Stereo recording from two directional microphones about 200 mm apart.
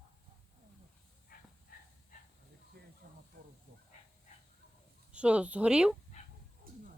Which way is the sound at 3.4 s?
50° right (ahead or behind).